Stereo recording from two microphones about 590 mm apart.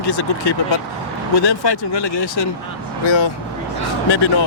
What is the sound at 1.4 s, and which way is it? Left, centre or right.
Speech, left.